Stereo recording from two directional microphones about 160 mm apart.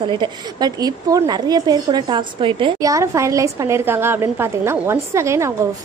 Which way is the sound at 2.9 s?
20° right (ahead or behind).